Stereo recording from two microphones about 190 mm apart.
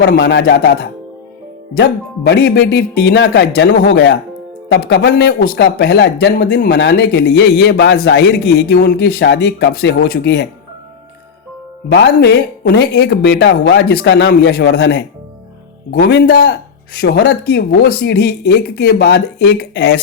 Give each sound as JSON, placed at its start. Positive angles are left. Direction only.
{"t": 0.0, "sound": "speech", "side_deg": 60}
{"t": 11.9, "sound": "speech", "side_deg": 65}